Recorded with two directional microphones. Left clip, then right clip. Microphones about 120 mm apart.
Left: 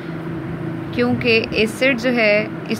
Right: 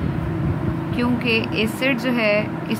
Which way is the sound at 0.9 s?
25° left (ahead or behind).